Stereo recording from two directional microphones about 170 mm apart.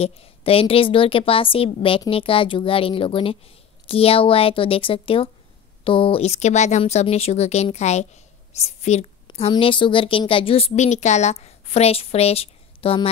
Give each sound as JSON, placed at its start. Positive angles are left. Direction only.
{"t": 0.0, "sound": "speech", "side_deg": 35}